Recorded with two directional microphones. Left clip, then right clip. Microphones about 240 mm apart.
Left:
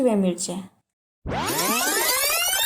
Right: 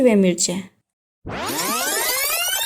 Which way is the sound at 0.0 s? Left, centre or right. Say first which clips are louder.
Right 6 dB; right.